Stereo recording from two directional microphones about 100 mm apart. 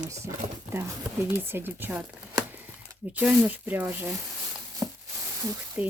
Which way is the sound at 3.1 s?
15° right (ahead or behind).